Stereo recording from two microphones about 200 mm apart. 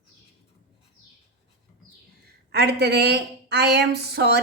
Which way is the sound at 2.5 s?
55° right (ahead or behind).